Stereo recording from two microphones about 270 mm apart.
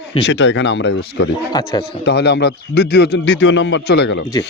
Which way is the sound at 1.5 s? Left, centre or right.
Centre.